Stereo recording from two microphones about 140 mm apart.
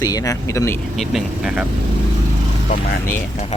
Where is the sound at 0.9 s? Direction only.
Centre (ahead or behind).